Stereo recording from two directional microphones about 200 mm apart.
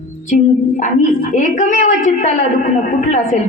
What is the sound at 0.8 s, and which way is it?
A woman's voice, 40° left (ahead or behind).